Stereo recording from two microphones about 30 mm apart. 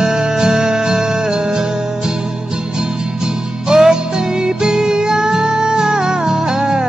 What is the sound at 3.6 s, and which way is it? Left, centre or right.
Music, right.